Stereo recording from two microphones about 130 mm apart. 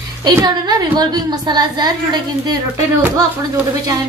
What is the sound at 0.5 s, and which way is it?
A woman's voice, 30° right (ahead or behind).